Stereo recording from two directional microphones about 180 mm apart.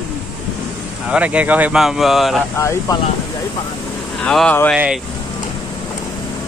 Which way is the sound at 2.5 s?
15° left (ahead or behind).